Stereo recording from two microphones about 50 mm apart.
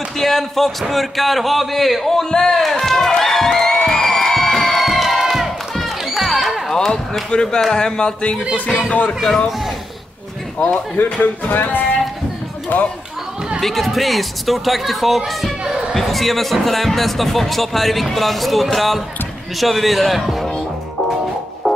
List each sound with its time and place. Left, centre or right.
0.2 s a sound: centre
7.2 s speech: centre
10.6 s speech: left
13.6 s speech: centre
21.6 s music: centre